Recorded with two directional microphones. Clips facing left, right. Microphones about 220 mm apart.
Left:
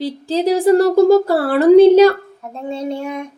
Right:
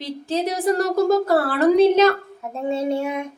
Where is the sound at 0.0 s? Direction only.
30° left (ahead or behind).